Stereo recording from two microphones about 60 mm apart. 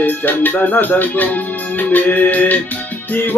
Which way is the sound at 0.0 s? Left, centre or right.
Left.